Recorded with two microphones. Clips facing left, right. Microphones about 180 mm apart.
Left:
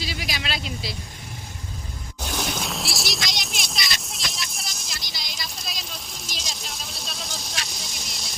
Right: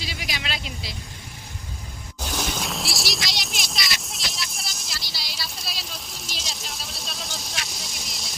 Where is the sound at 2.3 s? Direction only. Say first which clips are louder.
Even; centre (ahead or behind).